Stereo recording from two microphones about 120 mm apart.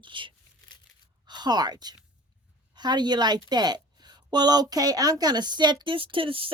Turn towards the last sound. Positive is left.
turn(degrees=-50)  # may be behind; listen again after turning